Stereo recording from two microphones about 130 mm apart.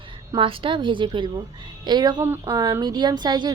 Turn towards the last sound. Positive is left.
turn(degrees=-35)  # may be behind; listen again after turning